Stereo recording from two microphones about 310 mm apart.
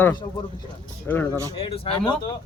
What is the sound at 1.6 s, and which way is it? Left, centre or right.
Speech, centre.